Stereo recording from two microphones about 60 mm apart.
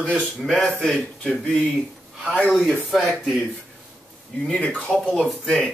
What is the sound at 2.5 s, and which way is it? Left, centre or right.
Speech, centre.